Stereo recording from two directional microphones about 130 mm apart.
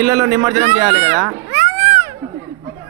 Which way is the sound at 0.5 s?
60° right (ahead or behind).